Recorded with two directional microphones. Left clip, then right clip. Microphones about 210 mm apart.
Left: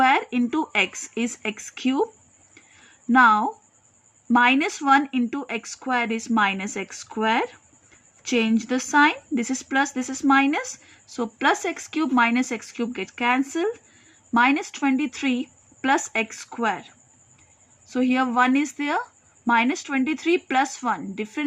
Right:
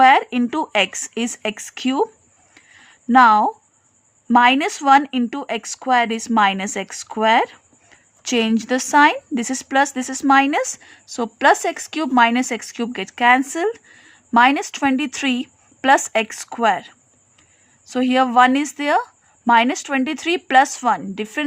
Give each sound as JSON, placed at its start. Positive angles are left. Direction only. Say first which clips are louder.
{"t": 0.0, "sound": "a woman's voice", "louder": "right 7 dB", "side_deg": -45}
{"t": 3.1, "sound": "a woman's voice", "louder": "right 5 dB", "side_deg": -45}